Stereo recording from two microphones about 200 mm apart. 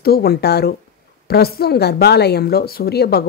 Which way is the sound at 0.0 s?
50° left (ahead or behind).